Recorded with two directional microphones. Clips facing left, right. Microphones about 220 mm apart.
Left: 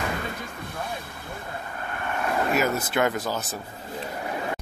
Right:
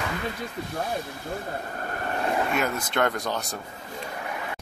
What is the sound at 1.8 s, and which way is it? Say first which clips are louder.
Vehicle: even; 40° right (ahead or behind).